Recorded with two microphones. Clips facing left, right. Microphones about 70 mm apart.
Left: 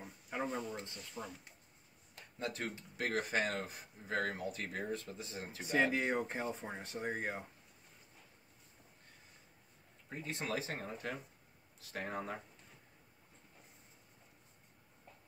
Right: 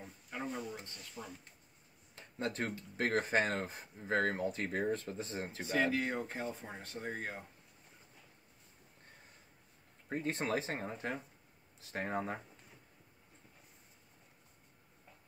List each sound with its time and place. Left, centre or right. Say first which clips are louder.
0.0 s a sound: left 2 dB; centre
1.1 s speech: left 1 dB; centre
2.3 s speech: right 3 dB; right
5.7 s speech: left 1 dB; left
10.0 s speech: right 5 dB; right